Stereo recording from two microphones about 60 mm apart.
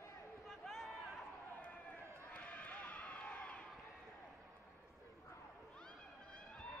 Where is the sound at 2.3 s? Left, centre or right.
Left.